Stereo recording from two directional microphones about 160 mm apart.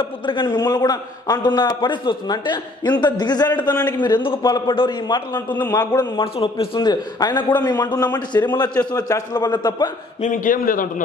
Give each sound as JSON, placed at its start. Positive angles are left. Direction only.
{"t": 0.0, "sound": "a man's voice", "side_deg": 30}
{"t": 5.3, "sound": "a man's voice", "side_deg": 10}
{"t": 5.7, "sound": "a man's voice", "side_deg": 25}
{"t": 10.2, "sound": "a man's voice", "side_deg": 55}